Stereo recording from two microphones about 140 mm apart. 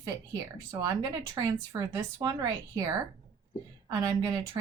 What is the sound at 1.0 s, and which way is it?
A woman's voice, 25° right (ahead or behind).